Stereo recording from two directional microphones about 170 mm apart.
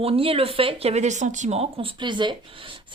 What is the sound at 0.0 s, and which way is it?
Speech, 35° right (ahead or behind).